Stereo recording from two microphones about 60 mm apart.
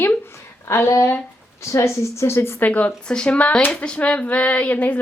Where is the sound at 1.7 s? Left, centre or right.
Left.